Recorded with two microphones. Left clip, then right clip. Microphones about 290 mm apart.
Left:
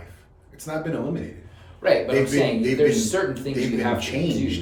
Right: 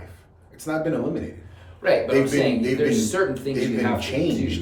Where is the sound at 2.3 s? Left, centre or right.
Centre.